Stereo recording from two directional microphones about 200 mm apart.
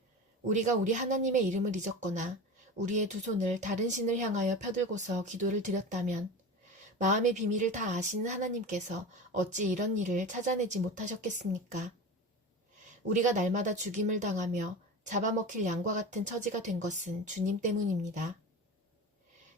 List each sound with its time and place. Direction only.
0.4 s a woman's voice: 40° right (ahead or behind)
13.2 s a woman's voice: 40° right (ahead or behind)